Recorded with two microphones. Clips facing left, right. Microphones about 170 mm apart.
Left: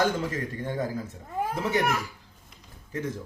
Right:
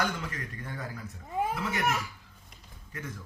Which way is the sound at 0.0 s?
30° left (ahead or behind).